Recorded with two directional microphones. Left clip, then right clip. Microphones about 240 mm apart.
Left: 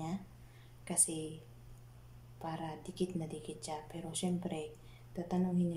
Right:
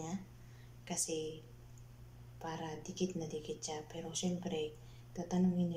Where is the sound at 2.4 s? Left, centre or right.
Centre.